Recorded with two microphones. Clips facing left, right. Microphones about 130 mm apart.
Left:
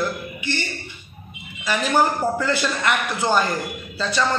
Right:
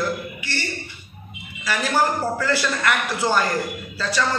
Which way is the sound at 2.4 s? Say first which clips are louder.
Even; 20° left (ahead or behind).